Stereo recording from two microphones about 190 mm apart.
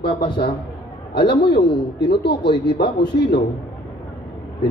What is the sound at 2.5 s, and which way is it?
Speech, 25° left (ahead or behind).